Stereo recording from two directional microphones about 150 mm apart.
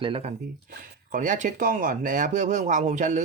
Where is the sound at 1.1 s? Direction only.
60° right (ahead or behind).